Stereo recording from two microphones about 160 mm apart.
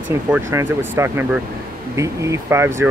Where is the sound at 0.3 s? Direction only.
15° right (ahead or behind).